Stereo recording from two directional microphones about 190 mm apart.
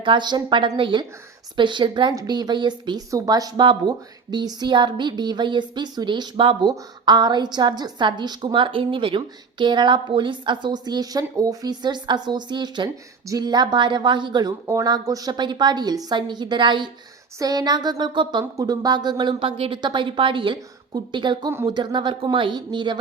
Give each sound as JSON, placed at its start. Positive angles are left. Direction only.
{"t": 0.0, "sound": "a woman's voice", "side_deg": -25}